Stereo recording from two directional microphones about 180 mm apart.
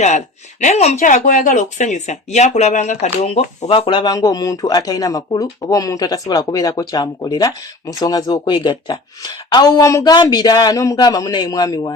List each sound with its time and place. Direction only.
0.6 s speech: 40° left (ahead or behind); by 11.9 s 20° left (ahead or behind)